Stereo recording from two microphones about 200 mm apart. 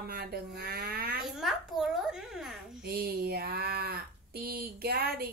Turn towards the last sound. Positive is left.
turn(degrees=-50)  # may be behind; listen again after turning